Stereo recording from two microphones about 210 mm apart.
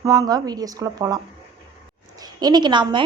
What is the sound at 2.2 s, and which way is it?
Speech, 20° right (ahead or behind).